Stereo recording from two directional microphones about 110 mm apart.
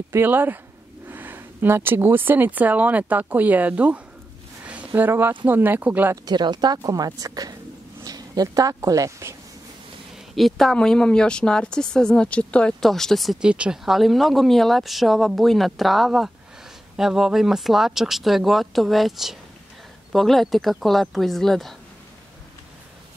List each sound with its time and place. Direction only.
0.1 s speech: 20° right (ahead or behind)
6.2 s speech: 40° right (ahead or behind)
10.3 s speech: centre (ahead or behind)